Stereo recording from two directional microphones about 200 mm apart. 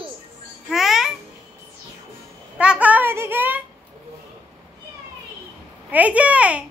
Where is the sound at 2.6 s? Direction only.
5° right (ahead or behind).